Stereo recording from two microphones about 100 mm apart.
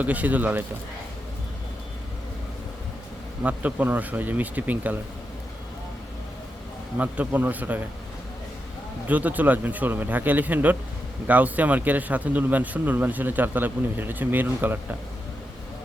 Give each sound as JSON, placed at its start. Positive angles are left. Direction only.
{"t": 0.0, "sound": "speech", "side_deg": -15}
{"t": 3.4, "sound": "speech", "side_deg": -15}
{"t": 7.0, "sound": "speech", "side_deg": -15}
{"t": 9.0, "sound": "speech", "side_deg": -15}